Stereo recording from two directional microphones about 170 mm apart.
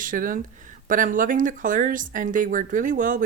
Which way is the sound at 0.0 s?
55° right (ahead or behind).